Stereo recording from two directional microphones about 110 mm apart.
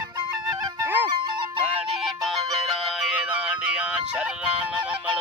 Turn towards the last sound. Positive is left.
turn(degrees=-10)  # may be behind; listen again after turning